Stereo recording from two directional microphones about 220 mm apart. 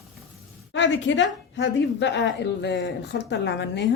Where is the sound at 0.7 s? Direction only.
55° left (ahead or behind).